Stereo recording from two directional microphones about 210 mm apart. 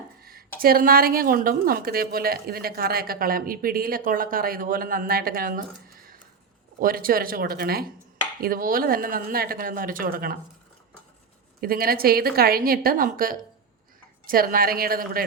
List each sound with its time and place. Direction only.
0.2 s a sound: 45° right (ahead or behind)
0.6 s a woman's voice: 45° right (ahead or behind)
11.6 s a woman's voice: 45° right (ahead or behind)